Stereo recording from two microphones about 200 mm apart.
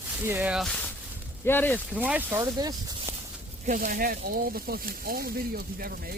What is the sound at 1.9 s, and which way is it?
Speech, 5° right (ahead or behind).